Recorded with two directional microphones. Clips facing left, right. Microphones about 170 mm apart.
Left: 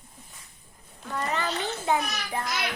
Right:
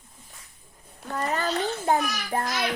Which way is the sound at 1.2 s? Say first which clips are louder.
Right 3 dB; 40° right (ahead or behind).